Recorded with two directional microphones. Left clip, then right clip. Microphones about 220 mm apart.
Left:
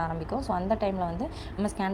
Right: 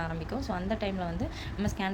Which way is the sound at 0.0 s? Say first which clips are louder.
Left 4 dB; 10° left (ahead or behind).